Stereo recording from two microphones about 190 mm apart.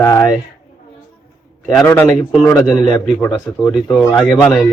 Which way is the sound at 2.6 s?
Centre (ahead or behind).